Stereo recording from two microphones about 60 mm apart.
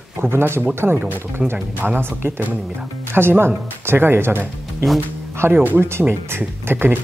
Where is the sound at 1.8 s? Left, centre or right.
Right.